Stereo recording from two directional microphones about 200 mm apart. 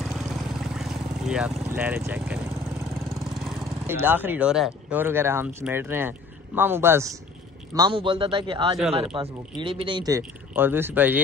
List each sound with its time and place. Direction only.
0.0 s vehicle: centre (ahead or behind)
1.7 s speech: 10° right (ahead or behind)
3.1 s lawn mower: 15° right (ahead or behind)
3.3 s lawn mower: centre (ahead or behind)
3.8 s speech: 10° right (ahead or behind)